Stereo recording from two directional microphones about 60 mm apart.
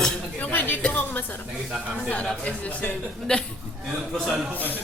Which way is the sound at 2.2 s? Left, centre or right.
Centre.